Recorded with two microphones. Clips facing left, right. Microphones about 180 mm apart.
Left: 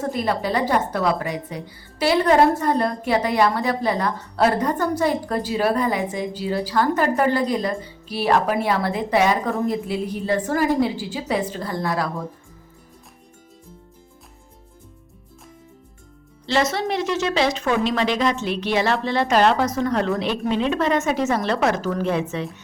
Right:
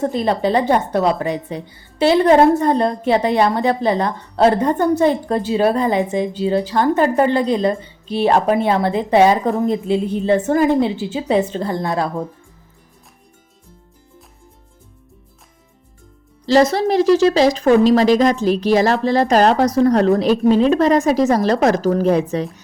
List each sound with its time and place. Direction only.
0.0 s a woman's voice: 25° right (ahead or behind)
16.5 s a woman's voice: 35° right (ahead or behind)